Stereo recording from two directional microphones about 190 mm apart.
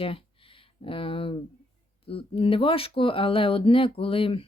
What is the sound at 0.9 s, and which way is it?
Speech, 30° left (ahead or behind).